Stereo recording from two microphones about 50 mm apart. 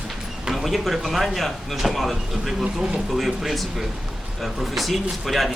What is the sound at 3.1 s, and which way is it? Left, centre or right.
Speech, centre.